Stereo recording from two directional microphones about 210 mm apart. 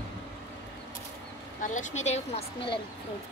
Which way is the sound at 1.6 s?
35° left (ahead or behind).